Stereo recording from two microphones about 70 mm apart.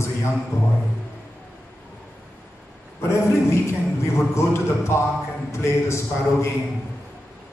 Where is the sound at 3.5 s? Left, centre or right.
Left.